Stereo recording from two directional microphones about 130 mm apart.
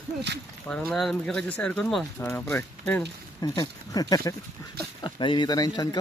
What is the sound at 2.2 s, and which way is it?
Speech, 15° left (ahead or behind).